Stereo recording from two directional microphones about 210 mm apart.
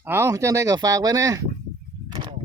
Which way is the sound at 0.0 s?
10° right (ahead or behind).